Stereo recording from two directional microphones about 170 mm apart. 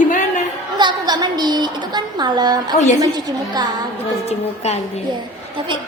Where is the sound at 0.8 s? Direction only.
25° right (ahead or behind).